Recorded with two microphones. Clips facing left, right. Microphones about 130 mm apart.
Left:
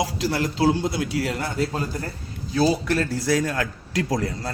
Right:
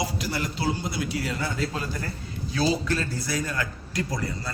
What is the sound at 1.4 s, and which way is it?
A man's voice, 50° left (ahead or behind).